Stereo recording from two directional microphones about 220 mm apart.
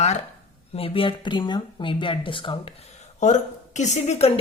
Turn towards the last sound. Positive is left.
turn(degrees=30)  # may be behind; listen again after turning